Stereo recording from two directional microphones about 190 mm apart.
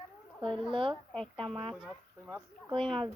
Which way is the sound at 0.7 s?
25° right (ahead or behind).